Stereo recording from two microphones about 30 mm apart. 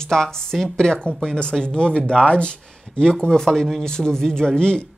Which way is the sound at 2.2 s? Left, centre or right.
Left.